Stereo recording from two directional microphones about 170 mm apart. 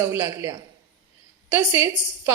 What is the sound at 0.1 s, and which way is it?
Speech, 15° right (ahead or behind).